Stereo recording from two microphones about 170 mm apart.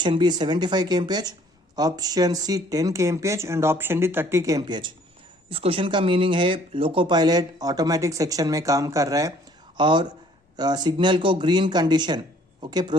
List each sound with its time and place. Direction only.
0.0 s speech: 25° right (ahead or behind)